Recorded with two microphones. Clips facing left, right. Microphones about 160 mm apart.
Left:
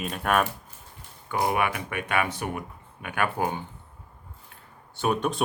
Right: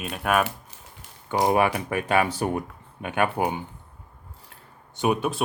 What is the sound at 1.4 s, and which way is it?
Speech, 30° right (ahead or behind).